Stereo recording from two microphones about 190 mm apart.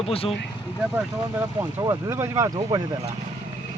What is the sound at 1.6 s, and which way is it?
Speech, 15° right (ahead or behind).